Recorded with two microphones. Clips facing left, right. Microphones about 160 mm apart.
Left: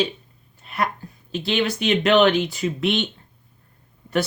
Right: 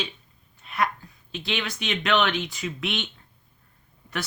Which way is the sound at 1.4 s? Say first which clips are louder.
Left 9 dB; 30° left (ahead or behind).